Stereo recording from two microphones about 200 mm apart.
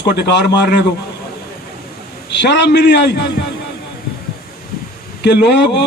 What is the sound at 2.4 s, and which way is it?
Speech, 60° left (ahead or behind).